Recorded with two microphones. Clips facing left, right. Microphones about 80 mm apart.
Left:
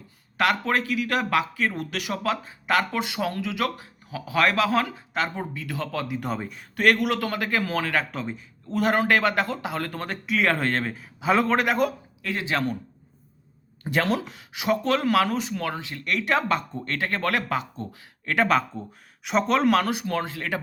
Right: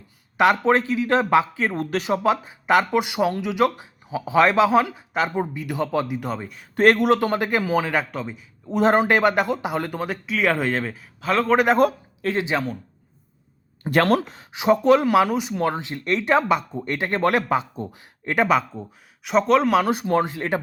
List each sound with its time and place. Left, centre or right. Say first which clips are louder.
0.3 s speech: right 6 dB; right
6.1 s speech: right 1 dB; centre
6.7 s speech: right 5 dB; right; by 8.0 s centre
8.1 s speech: right 1 dB; centre
8.7 s speech: right 4 dB; right; by 11.1 s centre
11.2 s a man's voice: even; centre
11.8 s speech: right 6 dB; right
12.3 s speech: right 5 dB; right
13.9 s speech: right 6 dB; right
14.3 s speech: right 6 dB; right
15.5 s speech: right 6 dB; right
18.4 s speech: right 2 dB; centre
19.9 s speech: right 6 dB; right